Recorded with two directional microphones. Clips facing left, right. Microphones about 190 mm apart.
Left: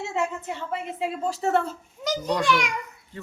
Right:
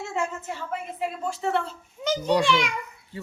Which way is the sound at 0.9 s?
25° left (ahead or behind).